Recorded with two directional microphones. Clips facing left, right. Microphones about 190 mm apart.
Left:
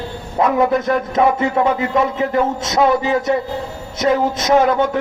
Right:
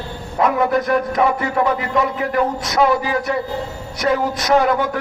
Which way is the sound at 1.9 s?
25° left (ahead or behind).